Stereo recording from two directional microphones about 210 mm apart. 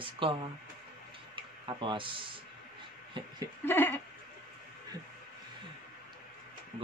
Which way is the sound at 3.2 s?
25° right (ahead or behind).